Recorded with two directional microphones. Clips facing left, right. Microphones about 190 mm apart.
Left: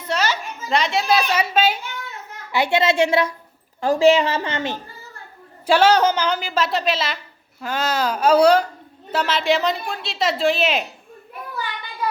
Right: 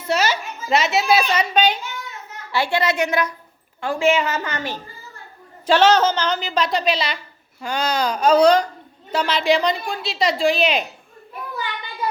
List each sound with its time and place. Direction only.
0.0 s a woman's voice: 10° right (ahead or behind); by 1.8 s 5° left (ahead or behind)
2.5 s a woman's voice: 20° left (ahead or behind)
5.6 s a woman's voice: 10° left (ahead or behind)